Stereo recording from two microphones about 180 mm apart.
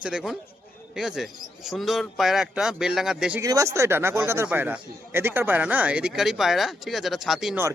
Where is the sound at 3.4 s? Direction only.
20° right (ahead or behind); by 7.6 s centre (ahead or behind).